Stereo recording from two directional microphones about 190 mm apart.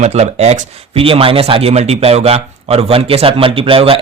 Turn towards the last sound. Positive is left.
turn(degrees=-30)  # may be behind; listen again after turning